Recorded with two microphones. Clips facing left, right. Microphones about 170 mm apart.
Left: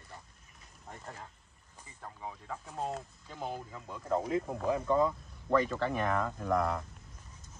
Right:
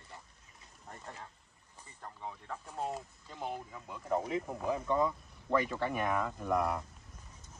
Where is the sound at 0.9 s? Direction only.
5° left (ahead or behind).